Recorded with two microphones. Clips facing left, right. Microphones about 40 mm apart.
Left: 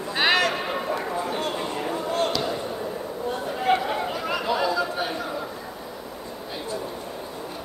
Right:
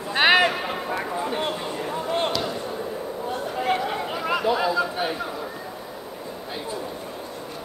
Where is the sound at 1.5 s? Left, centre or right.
Centre.